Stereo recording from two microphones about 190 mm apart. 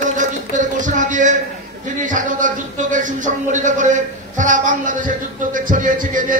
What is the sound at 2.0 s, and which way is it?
Speech, 45° right (ahead or behind).